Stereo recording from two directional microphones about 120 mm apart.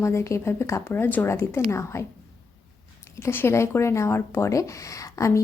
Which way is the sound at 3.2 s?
20° left (ahead or behind).